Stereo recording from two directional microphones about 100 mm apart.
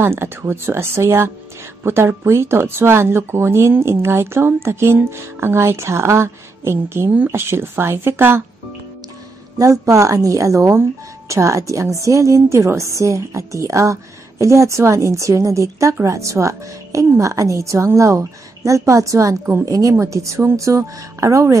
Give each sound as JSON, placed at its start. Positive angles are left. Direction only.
{"t": 0.0, "sound": "speech", "side_deg": -25}
{"t": 9.6, "sound": "a woman's voice", "side_deg": -35}